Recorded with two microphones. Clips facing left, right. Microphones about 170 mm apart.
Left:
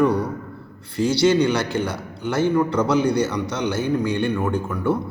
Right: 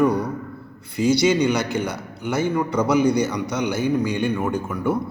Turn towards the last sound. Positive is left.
turn(degrees=-15)  # may be behind; listen again after turning